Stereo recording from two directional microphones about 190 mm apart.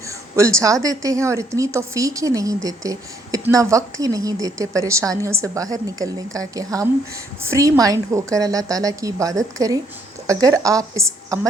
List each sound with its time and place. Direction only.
0.1 s a woman's voice: 15° right (ahead or behind)